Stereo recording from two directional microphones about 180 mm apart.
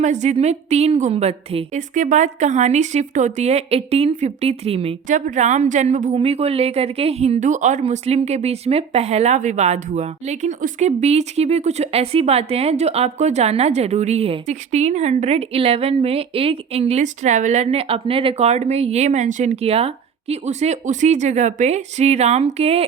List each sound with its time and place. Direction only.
0.0 s a woman's voice: 40° right (ahead or behind)